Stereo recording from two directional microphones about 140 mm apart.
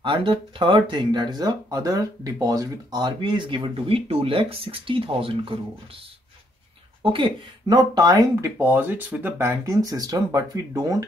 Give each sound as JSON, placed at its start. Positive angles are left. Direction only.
{"t": 0.0, "sound": "speech", "side_deg": -35}
{"t": 7.0, "sound": "speech", "side_deg": -35}